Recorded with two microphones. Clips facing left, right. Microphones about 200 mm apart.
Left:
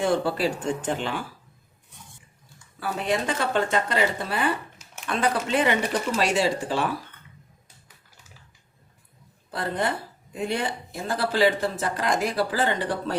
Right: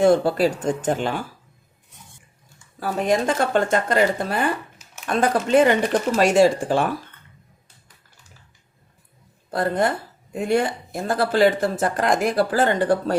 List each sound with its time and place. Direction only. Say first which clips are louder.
0.0 s speech: right 7 dB; 45° right (ahead or behind)
2.8 s speech: right 5 dB; 45° right (ahead or behind)
9.5 s speech: right 6 dB; 45° right (ahead or behind)